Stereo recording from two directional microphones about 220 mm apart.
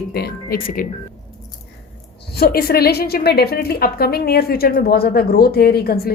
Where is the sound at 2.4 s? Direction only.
45° left (ahead or behind).